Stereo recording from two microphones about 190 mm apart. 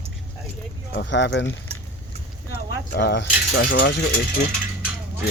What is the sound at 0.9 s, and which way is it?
Speech, 70° left (ahead or behind).